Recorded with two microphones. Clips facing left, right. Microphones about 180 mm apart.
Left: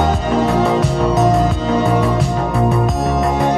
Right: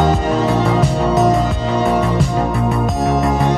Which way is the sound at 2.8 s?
Centre (ahead or behind).